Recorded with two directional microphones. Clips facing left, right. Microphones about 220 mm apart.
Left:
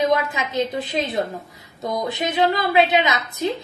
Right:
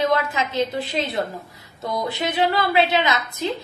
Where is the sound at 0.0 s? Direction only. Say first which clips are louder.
Left 1 dB; 20° left (ahead or behind).